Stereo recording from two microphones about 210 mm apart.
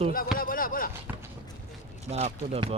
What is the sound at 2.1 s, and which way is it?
Speech, 30° right (ahead or behind).